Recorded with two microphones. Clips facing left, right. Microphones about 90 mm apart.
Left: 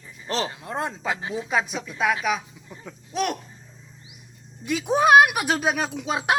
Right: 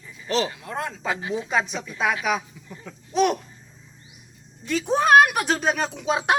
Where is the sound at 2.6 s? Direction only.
15° left (ahead or behind).